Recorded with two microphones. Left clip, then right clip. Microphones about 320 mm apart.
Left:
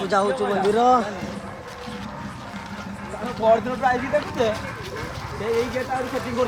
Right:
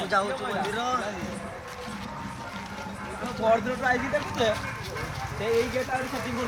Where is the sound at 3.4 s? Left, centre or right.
Centre.